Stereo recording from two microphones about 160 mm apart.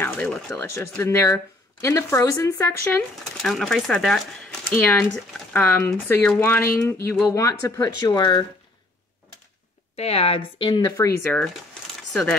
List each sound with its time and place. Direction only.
0.0 s a sound: 5° left (ahead or behind)
0.5 s speech: 15° left (ahead or behind)
3.4 s speech: centre (ahead or behind); by 8.5 s 25° left (ahead or behind)
9.9 s a woman's voice: 40° left (ahead or behind)
10.9 s speech: 20° left (ahead or behind)
12.1 s speech: 5° left (ahead or behind)